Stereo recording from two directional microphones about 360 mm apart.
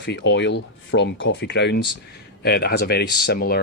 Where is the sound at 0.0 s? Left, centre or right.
Left.